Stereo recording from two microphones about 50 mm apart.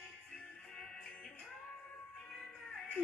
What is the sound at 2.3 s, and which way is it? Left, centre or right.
Music, centre.